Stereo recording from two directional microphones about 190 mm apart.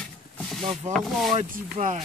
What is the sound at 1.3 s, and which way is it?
Speech, 40° right (ahead or behind).